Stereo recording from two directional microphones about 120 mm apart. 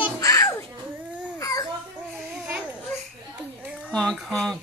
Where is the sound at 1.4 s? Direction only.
30° left (ahead or behind).